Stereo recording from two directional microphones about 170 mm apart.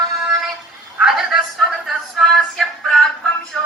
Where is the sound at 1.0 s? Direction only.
Centre (ahead or behind).